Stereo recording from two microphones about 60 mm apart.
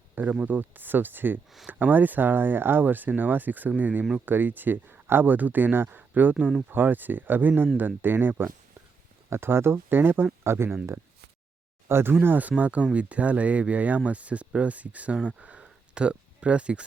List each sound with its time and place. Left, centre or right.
0.4 s speech: right
11.9 s speech: right
12.2 s speech: right
15.3 s a sound: right